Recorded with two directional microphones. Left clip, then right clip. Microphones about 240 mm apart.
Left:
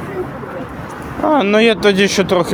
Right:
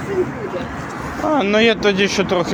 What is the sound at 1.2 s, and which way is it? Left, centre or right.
Speech, left.